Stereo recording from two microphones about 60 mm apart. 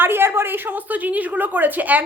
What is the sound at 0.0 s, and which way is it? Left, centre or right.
A woman's voice, right.